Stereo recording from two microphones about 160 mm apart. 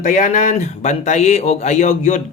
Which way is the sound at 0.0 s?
50° left (ahead or behind).